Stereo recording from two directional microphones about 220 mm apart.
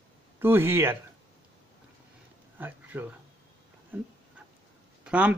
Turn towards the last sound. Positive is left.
turn(degrees=-5)  # may be behind; listen again after turning